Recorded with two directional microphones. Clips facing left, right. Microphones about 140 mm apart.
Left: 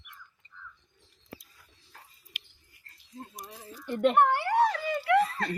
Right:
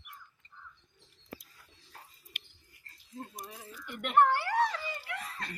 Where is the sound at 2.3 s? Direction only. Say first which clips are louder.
Left 2 dB; 50° right (ahead or behind).